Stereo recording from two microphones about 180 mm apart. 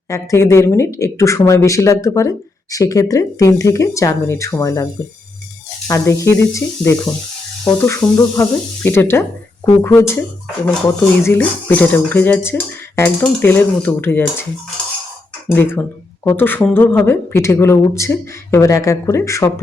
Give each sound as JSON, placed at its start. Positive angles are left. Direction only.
{"t": 0.1, "sound": "speech", "side_deg": 15}
{"t": 5.9, "sound": "speech", "side_deg": 15}
{"t": 15.4, "sound": "speech", "side_deg": 15}